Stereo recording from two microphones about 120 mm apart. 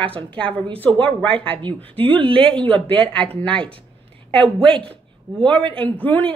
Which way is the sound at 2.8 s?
50° right (ahead or behind).